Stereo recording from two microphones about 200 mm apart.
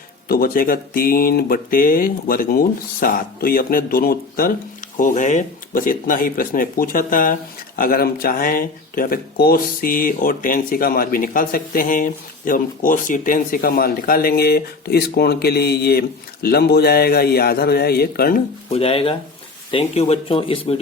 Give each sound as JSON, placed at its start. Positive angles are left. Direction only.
{"t": 0.3, "sound": "speech", "side_deg": 45}
{"t": 18.7, "sound": "speech", "side_deg": 30}